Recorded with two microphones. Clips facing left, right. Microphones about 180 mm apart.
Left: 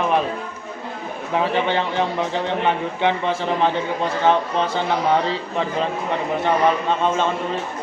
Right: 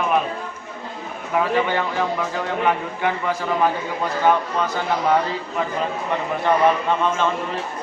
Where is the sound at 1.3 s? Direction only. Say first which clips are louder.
Even; 25° left (ahead or behind).